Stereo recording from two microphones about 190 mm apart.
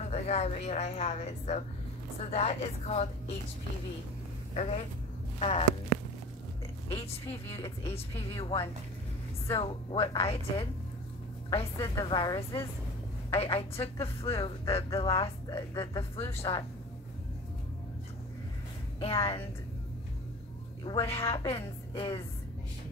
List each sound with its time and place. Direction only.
0.1 s a woman's voice: 35° left (ahead or behind)
4.6 s a woman's voice: 35° left (ahead or behind)
6.9 s a woman's voice: 30° left (ahead or behind)
11.8 s a woman's voice: 20° left (ahead or behind)
18.9 s a woman's voice: 30° left (ahead or behind)
20.8 s a woman's voice: 30° left (ahead or behind)